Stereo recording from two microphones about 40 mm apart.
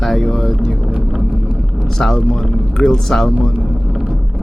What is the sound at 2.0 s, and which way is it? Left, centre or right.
Speech, left.